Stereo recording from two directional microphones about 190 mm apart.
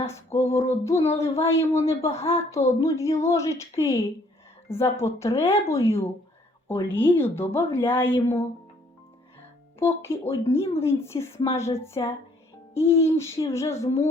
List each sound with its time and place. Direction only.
0.0 s a woman's voice: 15° left (ahead or behind)
10.1 s a woman's voice: 15° left (ahead or behind)